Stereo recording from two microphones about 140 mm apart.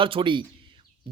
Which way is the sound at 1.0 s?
35° right (ahead or behind).